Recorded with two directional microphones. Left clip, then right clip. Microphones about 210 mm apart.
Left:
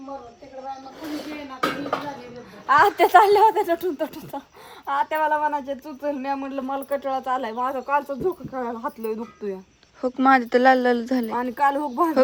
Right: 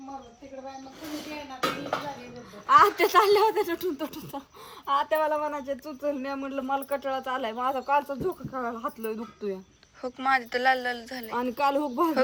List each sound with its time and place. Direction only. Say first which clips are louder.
2.6 s speech: left 2 dB; 15° left (ahead or behind)
10.0 s speech: left 8 dB; 25° left (ahead or behind)
11.3 s speech: left 3 dB; 10° left (ahead or behind)